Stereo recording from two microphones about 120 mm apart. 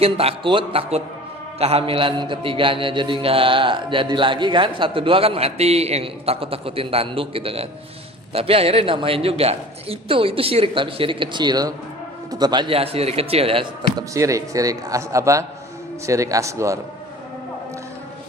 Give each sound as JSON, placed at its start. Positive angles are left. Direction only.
{"t": 0.0, "sound": "a man's voice", "side_deg": -55}
{"t": 13.9, "sound": "speech", "side_deg": -25}